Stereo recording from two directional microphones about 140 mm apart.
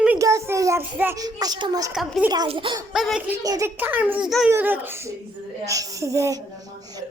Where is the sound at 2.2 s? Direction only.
30° right (ahead or behind).